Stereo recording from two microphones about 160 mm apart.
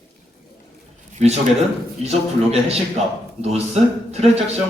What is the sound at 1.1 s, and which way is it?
A man's voice, 40° right (ahead or behind).